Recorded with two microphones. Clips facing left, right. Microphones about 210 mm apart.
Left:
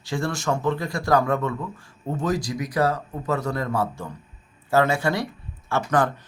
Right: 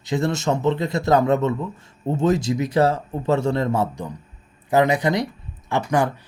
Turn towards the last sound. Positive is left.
turn(degrees=-15)  # may be behind; listen again after turning